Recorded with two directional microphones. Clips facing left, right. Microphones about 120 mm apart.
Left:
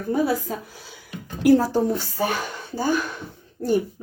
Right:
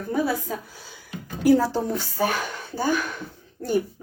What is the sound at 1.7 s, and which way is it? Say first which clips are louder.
Speech: left 4 dB; centre (ahead or behind).